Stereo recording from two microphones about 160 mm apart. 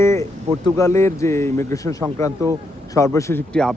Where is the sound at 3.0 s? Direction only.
20° left (ahead or behind).